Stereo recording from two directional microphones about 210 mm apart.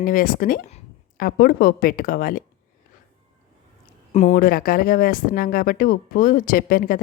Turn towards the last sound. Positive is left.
turn(degrees=45)  # may be behind; listen again after turning